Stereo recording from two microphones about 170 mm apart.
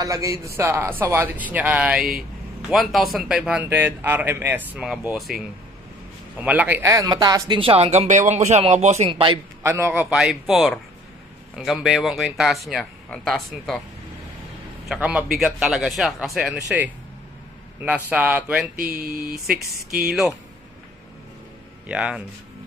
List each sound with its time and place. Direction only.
0.0 s speech: 20° right (ahead or behind)
9.6 s speech: 15° right (ahead or behind); by 13.7 s centre (ahead or behind)
14.9 s speech: 5° right (ahead or behind)
18.8 s speech: 60° right (ahead or behind)
20.1 s speech: centre (ahead or behind)
21.8 s speech: 5° right (ahead or behind)